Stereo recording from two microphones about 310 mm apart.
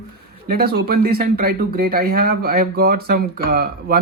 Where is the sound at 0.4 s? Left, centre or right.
Right.